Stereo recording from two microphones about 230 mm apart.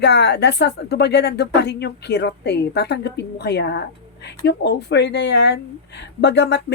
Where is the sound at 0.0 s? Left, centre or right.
Left.